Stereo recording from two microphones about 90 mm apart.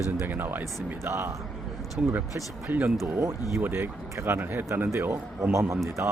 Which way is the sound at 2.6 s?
20° right (ahead or behind).